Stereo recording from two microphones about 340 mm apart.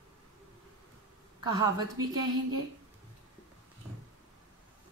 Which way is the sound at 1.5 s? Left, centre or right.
Centre.